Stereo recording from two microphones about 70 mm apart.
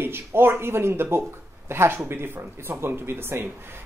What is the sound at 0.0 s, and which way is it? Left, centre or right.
Speech, right.